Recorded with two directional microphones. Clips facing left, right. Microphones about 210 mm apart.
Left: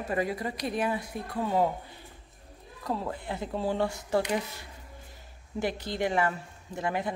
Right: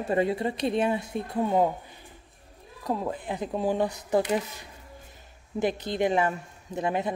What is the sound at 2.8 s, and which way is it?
Speech, 20° right (ahead or behind).